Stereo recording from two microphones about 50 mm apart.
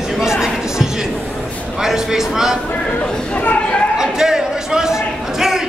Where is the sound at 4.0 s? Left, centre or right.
Centre.